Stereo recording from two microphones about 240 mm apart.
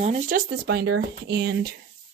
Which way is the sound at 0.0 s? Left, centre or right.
Right.